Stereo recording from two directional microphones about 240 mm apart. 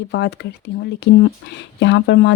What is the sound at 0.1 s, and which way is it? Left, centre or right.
Speech, left.